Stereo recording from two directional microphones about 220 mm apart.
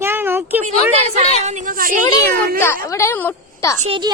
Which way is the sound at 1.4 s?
35° right (ahead or behind).